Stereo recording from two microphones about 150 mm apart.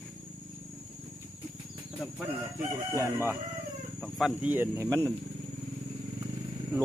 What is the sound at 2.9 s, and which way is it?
Speech, 15° right (ahead or behind).